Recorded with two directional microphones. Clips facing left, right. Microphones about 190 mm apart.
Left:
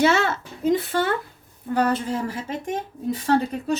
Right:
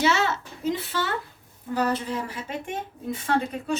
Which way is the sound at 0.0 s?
50° left (ahead or behind).